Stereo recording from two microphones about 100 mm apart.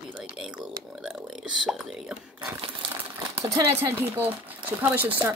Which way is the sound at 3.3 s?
30° right (ahead or behind).